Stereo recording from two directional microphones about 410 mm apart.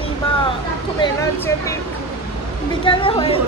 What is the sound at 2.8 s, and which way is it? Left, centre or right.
Speech, centre.